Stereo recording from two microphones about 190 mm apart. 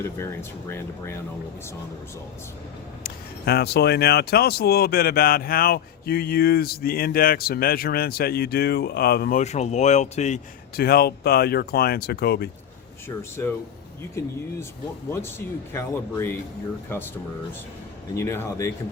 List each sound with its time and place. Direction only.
0.7 s speech: 15° left (ahead or behind)
3.0 s speech: 55° left (ahead or behind)
9.4 s speech: 35° left (ahead or behind)
10.8 s speech: 55° left (ahead or behind)
13.4 s speech: 15° left (ahead or behind)
18.1 s speech: 15° left (ahead or behind)